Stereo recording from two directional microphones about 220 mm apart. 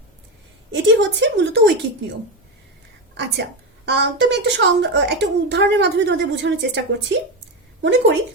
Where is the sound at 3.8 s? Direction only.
50° right (ahead or behind).